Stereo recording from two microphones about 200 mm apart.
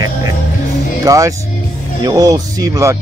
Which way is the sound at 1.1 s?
15° right (ahead or behind).